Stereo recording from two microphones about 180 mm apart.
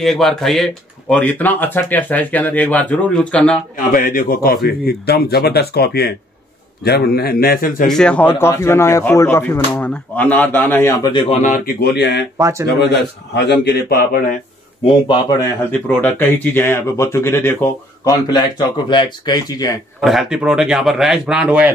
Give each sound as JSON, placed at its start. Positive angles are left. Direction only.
{"t": 0.0, "sound": "speech", "side_deg": 0}
{"t": 3.9, "sound": "speech", "side_deg": 50}
{"t": 7.9, "sound": "speech", "side_deg": 5}
{"t": 12.4, "sound": "speech", "side_deg": -15}
{"t": 12.6, "sound": "speech", "side_deg": 70}
{"t": 15.7, "sound": "speech", "side_deg": 10}
{"t": 20.0, "sound": "speech", "side_deg": 0}